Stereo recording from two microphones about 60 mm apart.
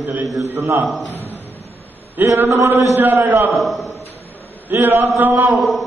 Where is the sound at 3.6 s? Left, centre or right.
Centre.